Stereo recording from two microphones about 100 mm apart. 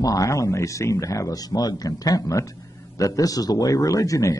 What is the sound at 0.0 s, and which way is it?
Speech, 35° left (ahead or behind).